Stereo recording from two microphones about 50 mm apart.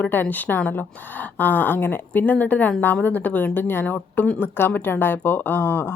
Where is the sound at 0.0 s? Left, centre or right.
Left.